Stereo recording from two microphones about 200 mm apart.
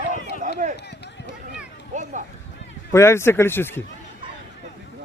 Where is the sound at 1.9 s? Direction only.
40° right (ahead or behind).